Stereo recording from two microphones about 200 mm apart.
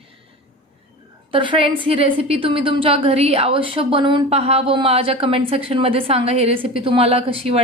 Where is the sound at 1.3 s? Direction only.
25° right (ahead or behind).